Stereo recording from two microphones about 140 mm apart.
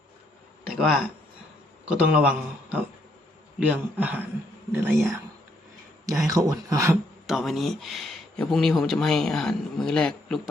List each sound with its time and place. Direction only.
0.7 s speech: centre (ahead or behind); by 6.9 s 25° right (ahead or behind)
7.3 s speech: centre (ahead or behind)